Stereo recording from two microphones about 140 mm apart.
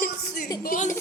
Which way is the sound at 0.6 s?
75° left (ahead or behind).